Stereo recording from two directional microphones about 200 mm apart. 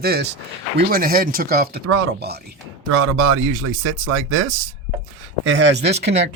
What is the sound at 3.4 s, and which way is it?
Speech, 85° right.